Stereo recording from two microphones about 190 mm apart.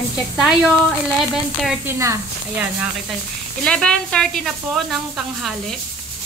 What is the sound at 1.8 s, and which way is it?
Speech, 15° right (ahead or behind).